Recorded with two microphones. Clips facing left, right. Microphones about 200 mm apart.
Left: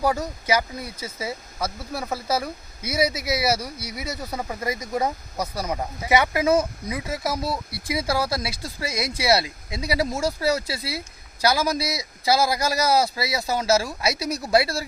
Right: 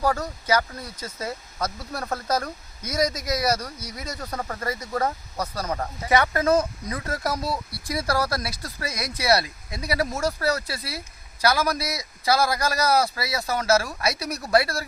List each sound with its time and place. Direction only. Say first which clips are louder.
0.0 s speech: left 1 dB; 10° left (ahead or behind)
9.0 s speech: left 4 dB; 30° left (ahead or behind)
9.7 s speech: left 2 dB; 10° left (ahead or behind)